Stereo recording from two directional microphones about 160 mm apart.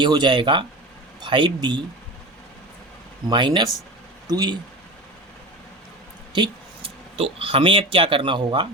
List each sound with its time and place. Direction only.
0.0 s speech: 30° right (ahead or behind)
3.2 s speech: 30° right (ahead or behind)
6.3 s speech: 30° right (ahead or behind)